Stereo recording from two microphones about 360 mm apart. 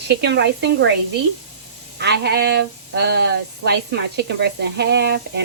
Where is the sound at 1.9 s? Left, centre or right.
Right.